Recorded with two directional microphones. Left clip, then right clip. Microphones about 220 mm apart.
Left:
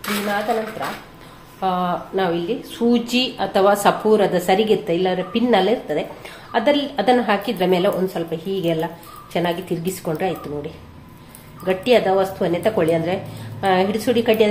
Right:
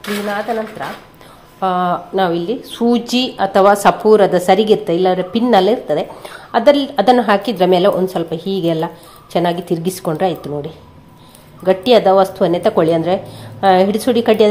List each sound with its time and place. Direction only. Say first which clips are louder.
1.6 s a woman's voice: right 5 dB; 30° right (ahead or behind)